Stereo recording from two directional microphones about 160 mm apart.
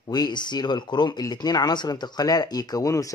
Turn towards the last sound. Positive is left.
turn(degrees=20)  # may be behind; listen again after turning